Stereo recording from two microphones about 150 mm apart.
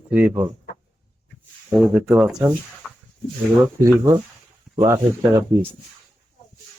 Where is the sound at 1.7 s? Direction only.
5° right (ahead or behind).